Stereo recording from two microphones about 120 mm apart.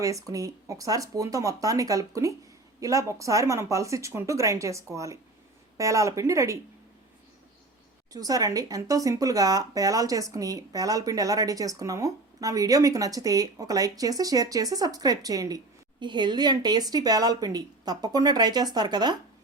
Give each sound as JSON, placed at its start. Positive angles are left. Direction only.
{"t": 0.0, "sound": "speech", "side_deg": -30}
{"t": 8.1, "sound": "speech", "side_deg": -30}